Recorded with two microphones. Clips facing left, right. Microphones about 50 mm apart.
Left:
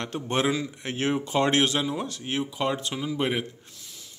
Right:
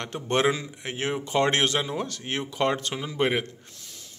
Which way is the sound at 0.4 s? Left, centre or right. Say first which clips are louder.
Right 1 dB; right.